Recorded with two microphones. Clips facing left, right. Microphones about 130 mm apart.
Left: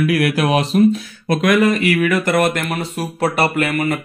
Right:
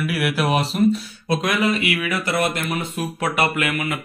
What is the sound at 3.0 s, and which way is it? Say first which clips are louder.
Speech: left 5 dB; 35° left (ahead or behind).